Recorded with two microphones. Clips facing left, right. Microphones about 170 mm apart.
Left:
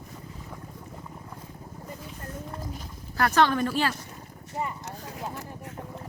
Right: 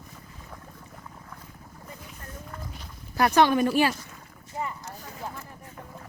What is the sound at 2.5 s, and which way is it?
Clip-clop, 40° left (ahead or behind).